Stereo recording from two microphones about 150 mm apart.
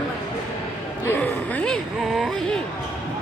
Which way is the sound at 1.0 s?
10° left (ahead or behind).